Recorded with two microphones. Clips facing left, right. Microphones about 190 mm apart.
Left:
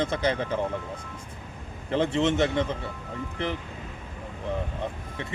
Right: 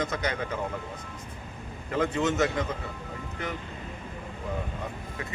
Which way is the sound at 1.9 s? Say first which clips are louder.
Left 3 dB; 30° left (ahead or behind).